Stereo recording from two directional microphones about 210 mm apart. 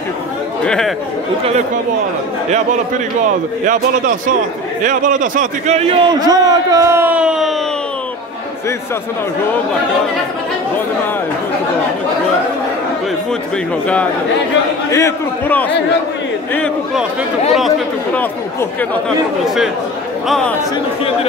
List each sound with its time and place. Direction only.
0.7 s speech: centre (ahead or behind)
4.8 s a man's voice: 40° right (ahead or behind); by 7.5 s 5° right (ahead or behind)
14.9 s a man's voice: 15° left (ahead or behind)